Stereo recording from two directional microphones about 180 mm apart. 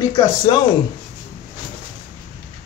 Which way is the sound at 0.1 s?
25° left (ahead or behind).